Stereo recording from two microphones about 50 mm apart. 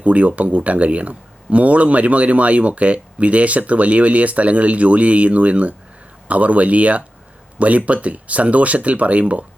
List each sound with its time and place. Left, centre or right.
0.0 s speech: right